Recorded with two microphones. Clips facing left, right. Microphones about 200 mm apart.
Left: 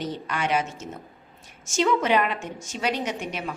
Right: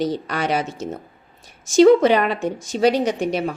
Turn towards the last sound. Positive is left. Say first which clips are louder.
# right 9 dB
turn(degrees=-35)  # may be behind; listen again after turning